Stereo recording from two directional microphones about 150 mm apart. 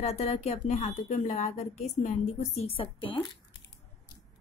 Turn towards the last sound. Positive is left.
turn(degrees=35)  # may be behind; listen again after turning